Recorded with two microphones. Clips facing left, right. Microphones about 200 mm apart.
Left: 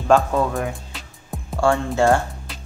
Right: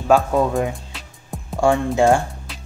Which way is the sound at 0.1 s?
15° right (ahead or behind).